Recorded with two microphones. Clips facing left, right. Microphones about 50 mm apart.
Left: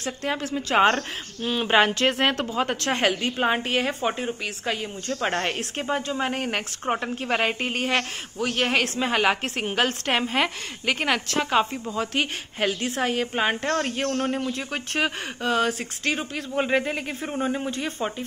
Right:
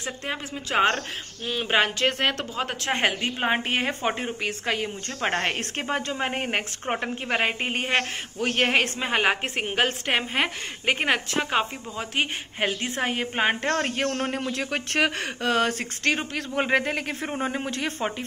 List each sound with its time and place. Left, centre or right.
0.0 s speech: centre
0.7 s a woman's voice: centre
3.0 s a woman's voice: right
5.2 s a woman's voice: right
5.5 s speech: right
6.1 s a woman's voice: right
8.4 s a woman's voice: right
9.0 s a woman's voice: centre
12.2 s a woman's voice: right
14.5 s speech: right
17.3 s speech: right
17.6 s speech: right